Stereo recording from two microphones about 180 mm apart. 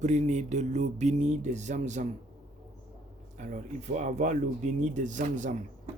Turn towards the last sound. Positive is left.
turn(degrees=-45)  # may be behind; listen again after turning